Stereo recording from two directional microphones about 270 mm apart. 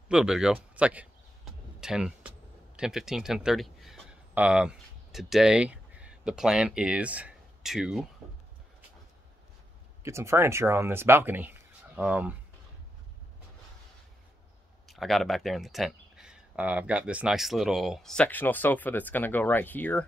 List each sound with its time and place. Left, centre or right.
0.1 s a sound: centre
10.0 s speech: centre
14.9 s speech: centre